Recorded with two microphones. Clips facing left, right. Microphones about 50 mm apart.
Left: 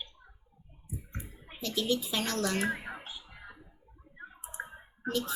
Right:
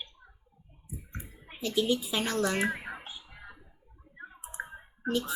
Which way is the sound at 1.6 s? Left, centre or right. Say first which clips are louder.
Right 3 dB; centre.